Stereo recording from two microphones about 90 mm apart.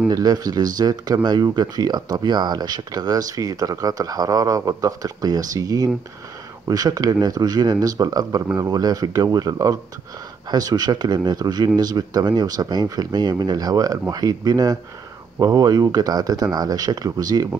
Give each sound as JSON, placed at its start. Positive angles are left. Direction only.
{"t": 0.1, "sound": "speech", "side_deg": -45}